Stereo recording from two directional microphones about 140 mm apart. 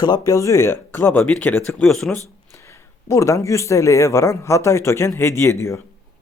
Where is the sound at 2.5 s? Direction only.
20° left (ahead or behind).